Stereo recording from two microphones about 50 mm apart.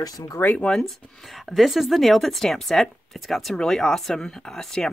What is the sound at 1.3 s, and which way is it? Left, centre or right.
A woman's voice, centre.